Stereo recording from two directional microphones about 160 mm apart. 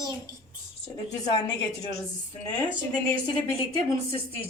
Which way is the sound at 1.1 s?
20° left (ahead or behind).